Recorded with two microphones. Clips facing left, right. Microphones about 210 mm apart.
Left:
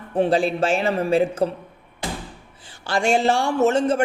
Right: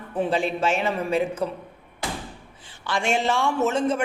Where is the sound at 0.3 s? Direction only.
35° left (ahead or behind).